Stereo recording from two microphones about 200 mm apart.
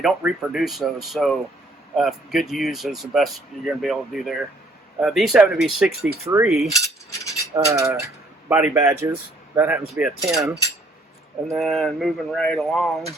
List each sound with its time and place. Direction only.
0.0 s speech: 5° right (ahead or behind)
6.7 s cutlery: 15° left (ahead or behind)
7.7 s speech: 15° right (ahead or behind)
9.6 s cutlery: 10° right (ahead or behind)
11.5 s speech: centre (ahead or behind)